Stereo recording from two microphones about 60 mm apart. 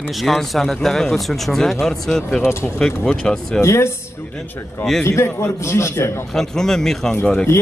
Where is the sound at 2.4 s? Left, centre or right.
Left.